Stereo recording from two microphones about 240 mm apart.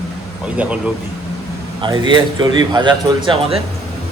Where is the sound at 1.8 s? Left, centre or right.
Centre.